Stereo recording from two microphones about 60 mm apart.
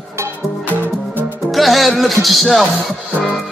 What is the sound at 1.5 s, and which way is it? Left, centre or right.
Music, centre.